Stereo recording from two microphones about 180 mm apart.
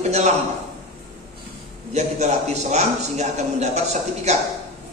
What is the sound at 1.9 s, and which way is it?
A man's voice, 40° right (ahead or behind).